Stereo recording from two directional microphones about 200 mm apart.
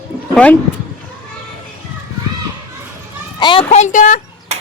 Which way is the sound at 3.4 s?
25° left (ahead or behind).